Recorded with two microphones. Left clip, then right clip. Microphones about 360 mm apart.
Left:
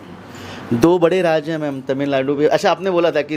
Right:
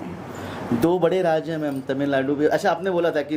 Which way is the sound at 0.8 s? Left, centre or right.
Left.